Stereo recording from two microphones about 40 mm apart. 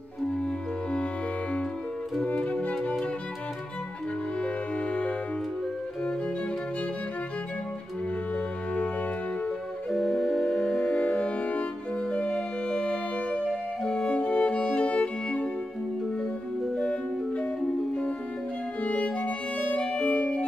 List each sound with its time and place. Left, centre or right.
2.3 s music: left
4.4 s music: left
9.8 s music: centre
10.4 s music: left
13.8 s violin: left
16.7 s music: left
18.8 s violin: left
20.0 s music: left